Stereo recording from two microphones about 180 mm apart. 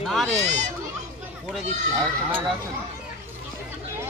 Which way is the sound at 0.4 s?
40° right (ahead or behind).